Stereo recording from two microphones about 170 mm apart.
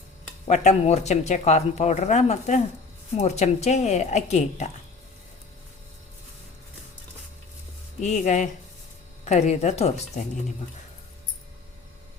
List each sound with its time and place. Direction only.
0.4 s speech: 40° left (ahead or behind)
8.0 s speech: 40° left (ahead or behind)